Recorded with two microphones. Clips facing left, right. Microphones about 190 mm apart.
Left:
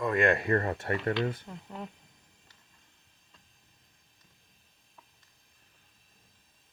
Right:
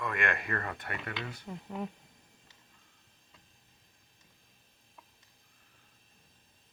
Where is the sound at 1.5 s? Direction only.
5° right (ahead or behind).